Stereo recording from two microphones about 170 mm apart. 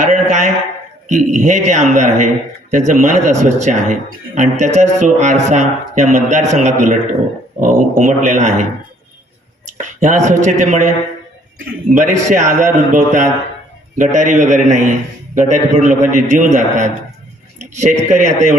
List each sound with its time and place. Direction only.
0.0 s a sound: 45° right (ahead or behind)
1.0 s a man's voice: 45° right (ahead or behind)
9.7 s speech: 45° right (ahead or behind)
11.9 s a man's voice: 45° right (ahead or behind)